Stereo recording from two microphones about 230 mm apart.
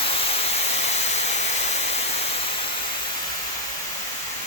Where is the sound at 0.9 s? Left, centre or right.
Left.